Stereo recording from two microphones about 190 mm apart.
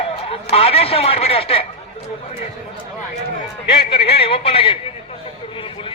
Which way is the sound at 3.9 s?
30° left (ahead or behind).